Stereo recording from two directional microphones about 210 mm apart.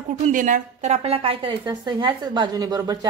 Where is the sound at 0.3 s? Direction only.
40° right (ahead or behind).